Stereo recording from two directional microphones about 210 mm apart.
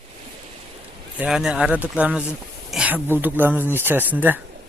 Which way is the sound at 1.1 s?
5° right (ahead or behind).